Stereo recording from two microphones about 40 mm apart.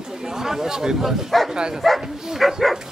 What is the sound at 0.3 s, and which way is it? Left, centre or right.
Speech, centre.